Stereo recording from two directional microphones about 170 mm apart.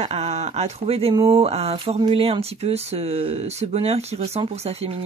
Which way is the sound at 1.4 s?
35° right (ahead or behind).